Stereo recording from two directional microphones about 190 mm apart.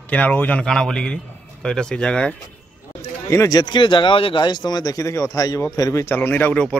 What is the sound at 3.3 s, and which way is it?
Speech, 15° left (ahead or behind).